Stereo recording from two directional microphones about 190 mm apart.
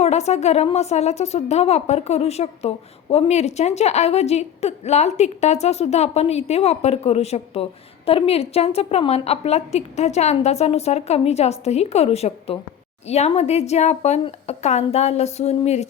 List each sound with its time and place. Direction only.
0.0 s a woman's voice: 35° left (ahead or behind)